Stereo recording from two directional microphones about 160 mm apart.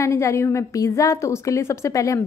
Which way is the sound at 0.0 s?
20° left (ahead or behind).